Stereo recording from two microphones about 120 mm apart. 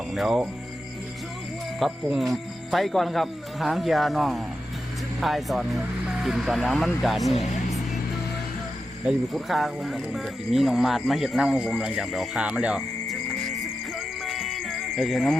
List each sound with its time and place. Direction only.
0.1 s speech: centre (ahead or behind)
1.8 s speech: centre (ahead or behind)
9.0 s speech: centre (ahead or behind)
14.3 s music: centre (ahead or behind)